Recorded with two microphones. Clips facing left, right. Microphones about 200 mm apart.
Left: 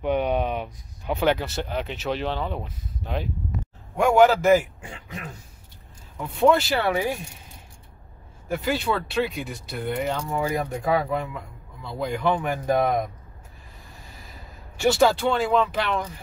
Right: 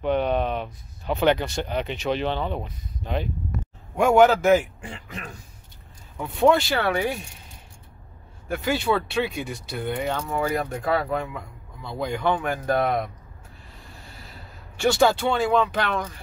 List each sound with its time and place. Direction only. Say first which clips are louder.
0.0 s speech: right 1 dB; 10° left (ahead or behind)
6.1 s speech: even; centre (ahead or behind)
8.5 s speech: right 1 dB; centre (ahead or behind)
10.5 s speech: left 1 dB; 15° left (ahead or behind)
12.0 s speech: even; centre (ahead or behind)
12.4 s speech: left 1 dB; 15° left (ahead or behind)
14.8 s speech: even; 5° left (ahead or behind)